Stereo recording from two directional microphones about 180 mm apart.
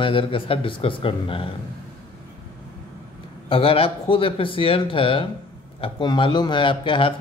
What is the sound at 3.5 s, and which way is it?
Speech, 30° left (ahead or behind).